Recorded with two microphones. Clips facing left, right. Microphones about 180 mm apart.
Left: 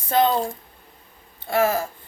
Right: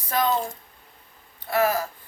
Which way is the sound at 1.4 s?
25° left (ahead or behind).